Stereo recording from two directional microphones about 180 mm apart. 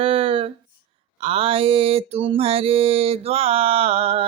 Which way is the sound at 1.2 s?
30° right (ahead or behind).